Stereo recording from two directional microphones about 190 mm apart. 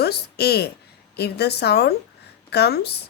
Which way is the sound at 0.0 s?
55° left (ahead or behind).